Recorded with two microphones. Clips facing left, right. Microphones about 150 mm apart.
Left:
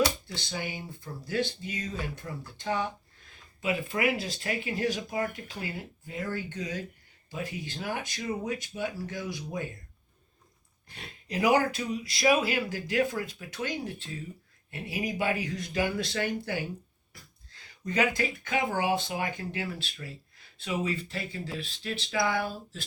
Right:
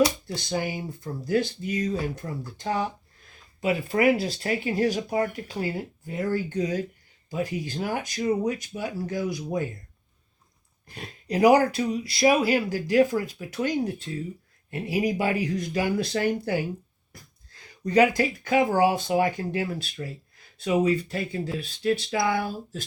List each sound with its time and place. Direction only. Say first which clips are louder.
0.3 s speech: right 7 dB; 40° right (ahead or behind)
10.8 s speech: right 8 dB; 40° right (ahead or behind)
17.8 s speech: right 8 dB; 40° right (ahead or behind)